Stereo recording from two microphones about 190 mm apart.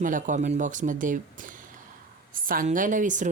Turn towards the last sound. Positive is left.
turn(degrees=-40)  # may be behind; listen again after turning